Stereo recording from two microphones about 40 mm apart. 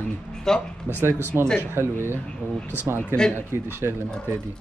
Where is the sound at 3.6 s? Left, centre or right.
Right.